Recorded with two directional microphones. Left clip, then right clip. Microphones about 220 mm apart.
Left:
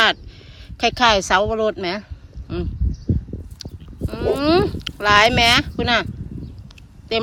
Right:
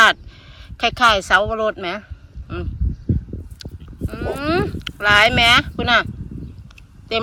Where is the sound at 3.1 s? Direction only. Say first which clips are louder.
Even; 25° right (ahead or behind).